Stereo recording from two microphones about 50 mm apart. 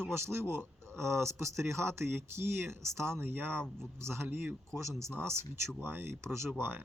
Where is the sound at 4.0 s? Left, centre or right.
Right.